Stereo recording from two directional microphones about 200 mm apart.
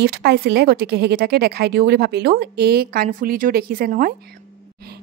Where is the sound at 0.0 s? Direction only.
55° right (ahead or behind).